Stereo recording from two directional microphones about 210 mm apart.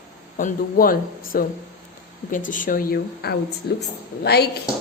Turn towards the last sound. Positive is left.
turn(degrees=50)  # may be behind; listen again after turning